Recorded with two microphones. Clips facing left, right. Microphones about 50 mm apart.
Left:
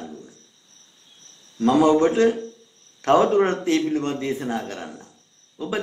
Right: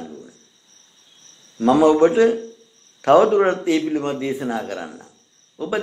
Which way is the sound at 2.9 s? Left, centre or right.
Centre.